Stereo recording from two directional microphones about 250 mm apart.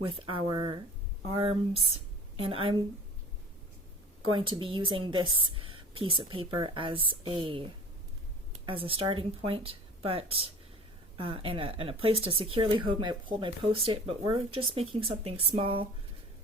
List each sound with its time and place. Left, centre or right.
0.0 s a woman's voice: right
4.3 s a woman's voice: centre